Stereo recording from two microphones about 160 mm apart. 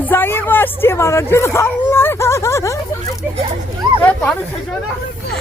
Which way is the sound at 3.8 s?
30° right (ahead or behind).